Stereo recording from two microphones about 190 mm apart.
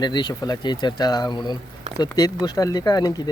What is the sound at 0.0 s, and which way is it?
Speech, 25° left (ahead or behind).